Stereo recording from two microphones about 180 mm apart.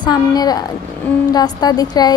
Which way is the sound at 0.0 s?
20° left (ahead or behind).